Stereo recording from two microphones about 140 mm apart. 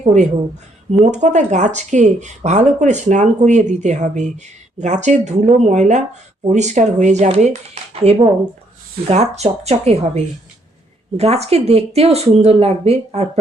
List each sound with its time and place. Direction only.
0.0 s speech: 55° right (ahead or behind)